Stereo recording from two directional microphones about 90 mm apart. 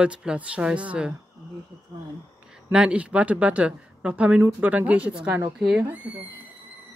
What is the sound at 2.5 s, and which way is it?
Speech, 10° right (ahead or behind).